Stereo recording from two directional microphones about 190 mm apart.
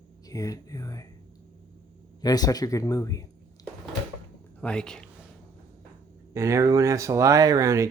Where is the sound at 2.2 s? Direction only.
20° left (ahead or behind).